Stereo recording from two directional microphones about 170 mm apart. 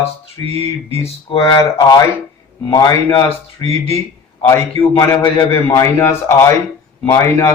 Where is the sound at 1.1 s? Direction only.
30° left (ahead or behind).